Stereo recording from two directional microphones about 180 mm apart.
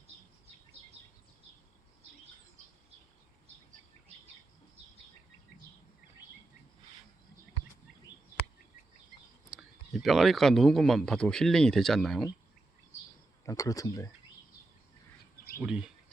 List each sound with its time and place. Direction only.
2.6 s a sound: 40° right (ahead or behind)
9.5 s speech: centre (ahead or behind)
13.4 s speech: 20° left (ahead or behind)
15.6 s speech: 5° right (ahead or behind)